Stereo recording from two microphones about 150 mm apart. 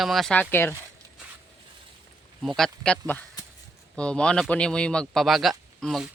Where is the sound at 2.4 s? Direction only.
Centre (ahead or behind).